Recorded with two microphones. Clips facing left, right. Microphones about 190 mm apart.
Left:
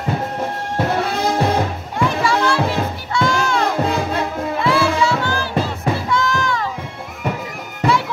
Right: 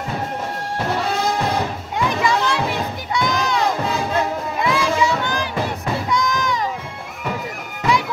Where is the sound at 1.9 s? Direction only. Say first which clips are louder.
Left 1 dB; 20° right (ahead or behind).